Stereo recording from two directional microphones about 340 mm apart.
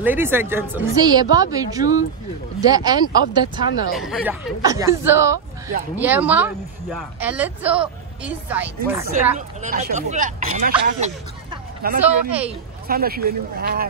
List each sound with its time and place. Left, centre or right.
0.0 s a woman's voice: centre
3.9 s a woman's voice: centre
9.6 s speech: right
11.8 s speech: right